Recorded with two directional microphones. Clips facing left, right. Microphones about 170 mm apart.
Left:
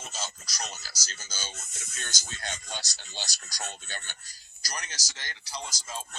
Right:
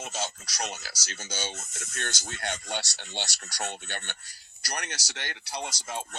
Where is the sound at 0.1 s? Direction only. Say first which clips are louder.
Right 5 dB; 65° right (ahead or behind).